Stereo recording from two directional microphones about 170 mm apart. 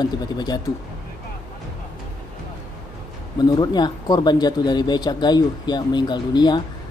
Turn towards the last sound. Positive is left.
turn(degrees=25)  # may be behind; listen again after turning